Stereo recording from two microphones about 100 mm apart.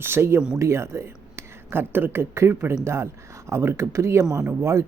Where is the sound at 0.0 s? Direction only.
25° right (ahead or behind).